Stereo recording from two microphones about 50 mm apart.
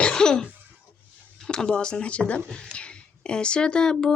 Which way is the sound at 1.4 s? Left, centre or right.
Centre.